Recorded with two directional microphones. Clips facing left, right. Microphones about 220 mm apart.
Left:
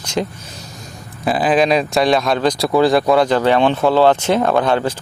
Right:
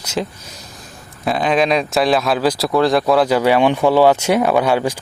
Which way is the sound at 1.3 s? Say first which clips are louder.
Left 1 dB; centre (ahead or behind).